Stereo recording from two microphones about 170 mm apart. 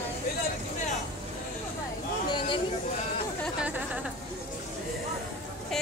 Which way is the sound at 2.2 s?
25° left (ahead or behind).